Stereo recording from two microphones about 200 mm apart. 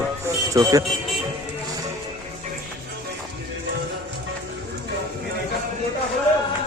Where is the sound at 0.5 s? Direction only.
15° right (ahead or behind).